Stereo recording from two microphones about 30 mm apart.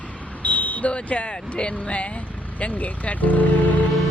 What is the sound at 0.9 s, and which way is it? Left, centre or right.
Speech, left.